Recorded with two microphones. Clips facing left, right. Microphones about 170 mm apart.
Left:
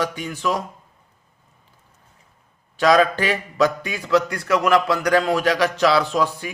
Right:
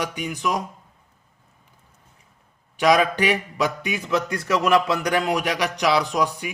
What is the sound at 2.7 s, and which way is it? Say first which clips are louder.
A man's voice: left 2 dB; 15° right (ahead or behind).